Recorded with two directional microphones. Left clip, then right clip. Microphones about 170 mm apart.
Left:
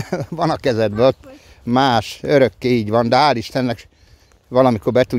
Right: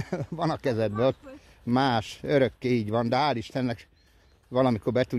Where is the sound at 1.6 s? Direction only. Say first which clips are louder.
Left 10 dB; 35° left (ahead or behind).